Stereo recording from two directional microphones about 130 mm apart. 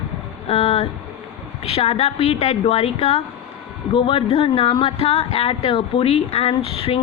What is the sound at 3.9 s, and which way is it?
Speech, 40° left (ahead or behind).